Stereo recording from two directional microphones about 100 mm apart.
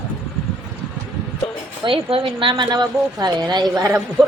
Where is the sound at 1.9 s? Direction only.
60° right (ahead or behind); by 3.9 s 45° right (ahead or behind).